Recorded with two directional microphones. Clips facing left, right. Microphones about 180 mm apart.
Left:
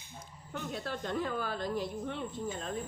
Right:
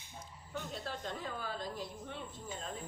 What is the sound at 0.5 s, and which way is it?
A woman's voice, 65° left (ahead or behind).